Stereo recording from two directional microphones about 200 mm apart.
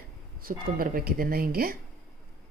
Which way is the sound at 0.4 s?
45° right (ahead or behind).